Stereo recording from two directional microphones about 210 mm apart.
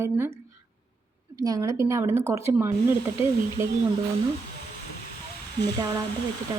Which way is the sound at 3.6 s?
10° right (ahead or behind).